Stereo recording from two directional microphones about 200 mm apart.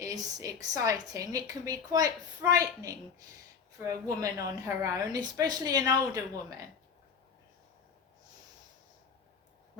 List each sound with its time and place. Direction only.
0.0 s a woman's voice: 15° right (ahead or behind)